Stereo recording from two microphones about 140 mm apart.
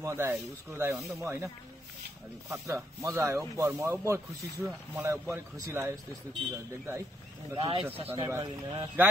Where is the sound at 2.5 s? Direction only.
20° right (ahead or behind).